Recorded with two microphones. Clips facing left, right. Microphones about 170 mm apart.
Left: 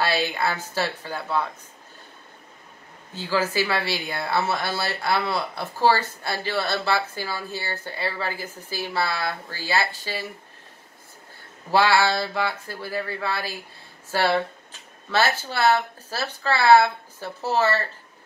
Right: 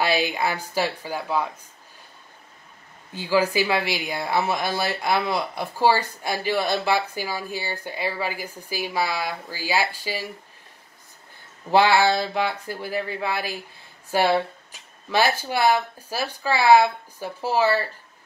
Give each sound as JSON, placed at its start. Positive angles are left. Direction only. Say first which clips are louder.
{"t": 0.0, "sound": "speech", "louder": "right 1 dB", "side_deg": -15}
{"t": 3.2, "sound": "speech", "louder": "right 3 dB", "side_deg": -15}
{"t": 11.7, "sound": "speech", "louder": "right 2 dB", "side_deg": -20}